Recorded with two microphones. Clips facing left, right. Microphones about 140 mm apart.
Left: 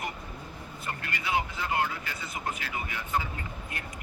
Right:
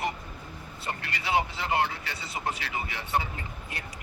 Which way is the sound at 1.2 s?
30° right (ahead or behind).